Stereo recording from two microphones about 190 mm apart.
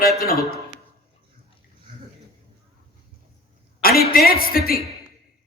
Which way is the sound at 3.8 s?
50° left (ahead or behind).